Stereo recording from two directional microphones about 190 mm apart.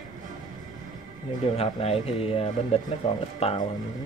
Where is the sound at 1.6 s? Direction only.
30° left (ahead or behind).